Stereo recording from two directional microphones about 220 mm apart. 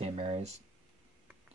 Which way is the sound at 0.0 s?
30° right (ahead or behind).